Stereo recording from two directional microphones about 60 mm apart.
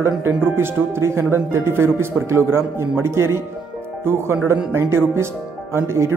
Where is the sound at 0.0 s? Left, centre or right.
Right.